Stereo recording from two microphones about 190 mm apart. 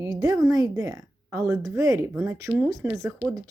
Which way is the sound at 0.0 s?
20° right (ahead or behind).